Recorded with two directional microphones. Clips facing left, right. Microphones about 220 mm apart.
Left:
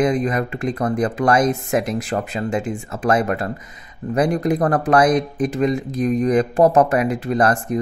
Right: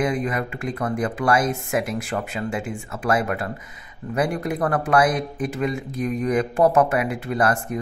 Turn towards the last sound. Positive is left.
turn(degrees=40)  # may be behind; listen again after turning